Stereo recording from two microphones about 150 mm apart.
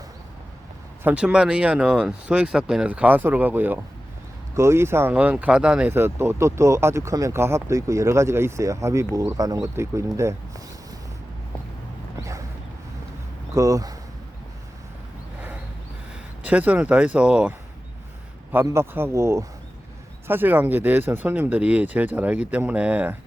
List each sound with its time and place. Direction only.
1.0 s speech: 5° right (ahead or behind)
13.5 s speech: 20° right (ahead or behind)
16.4 s speech: 10° right (ahead or behind)
18.5 s speech: 15° right (ahead or behind)